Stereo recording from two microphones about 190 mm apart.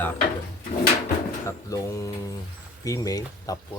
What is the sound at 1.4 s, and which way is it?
Speech, 15° left (ahead or behind).